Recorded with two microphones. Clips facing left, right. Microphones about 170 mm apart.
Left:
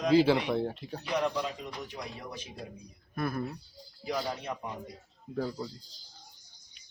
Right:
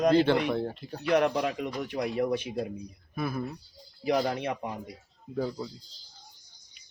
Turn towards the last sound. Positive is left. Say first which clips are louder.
# right 2 dB
turn(degrees=-5)  # may be behind; listen again after turning